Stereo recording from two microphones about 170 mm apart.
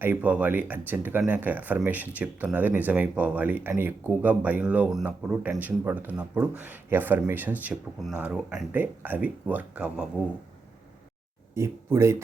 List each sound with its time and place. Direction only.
0.0 s speech: 10° right (ahead or behind)
11.5 s speech: 15° right (ahead or behind)